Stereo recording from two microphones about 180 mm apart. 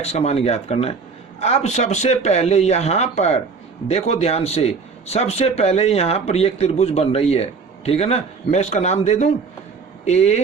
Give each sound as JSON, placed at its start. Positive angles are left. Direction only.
{"t": 0.0, "sound": "speech", "side_deg": 35}